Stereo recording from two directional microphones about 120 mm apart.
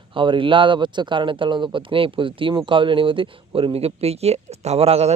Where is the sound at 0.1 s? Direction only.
45° right (ahead or behind).